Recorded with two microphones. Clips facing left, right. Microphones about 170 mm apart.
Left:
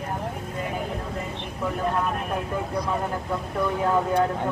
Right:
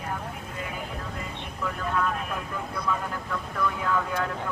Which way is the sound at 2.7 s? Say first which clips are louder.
Left 2 dB; 35° left (ahead or behind).